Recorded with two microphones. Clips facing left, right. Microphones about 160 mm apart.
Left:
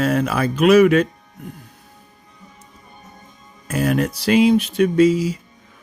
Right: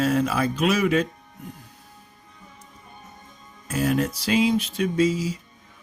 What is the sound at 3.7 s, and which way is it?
Speech, 65° left (ahead or behind).